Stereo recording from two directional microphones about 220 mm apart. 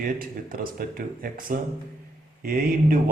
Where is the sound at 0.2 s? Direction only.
40° right (ahead or behind).